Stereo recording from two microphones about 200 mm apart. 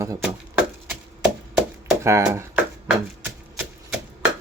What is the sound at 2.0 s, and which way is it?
Speech, 15° right (ahead or behind).